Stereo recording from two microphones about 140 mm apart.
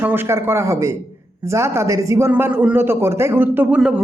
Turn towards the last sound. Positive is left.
turn(degrees=-5)  # may be behind; listen again after turning